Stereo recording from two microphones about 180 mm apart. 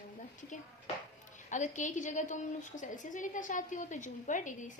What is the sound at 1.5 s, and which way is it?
A woman's voice, 45° left (ahead or behind).